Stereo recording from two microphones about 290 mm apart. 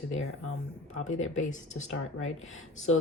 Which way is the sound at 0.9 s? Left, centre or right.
Left.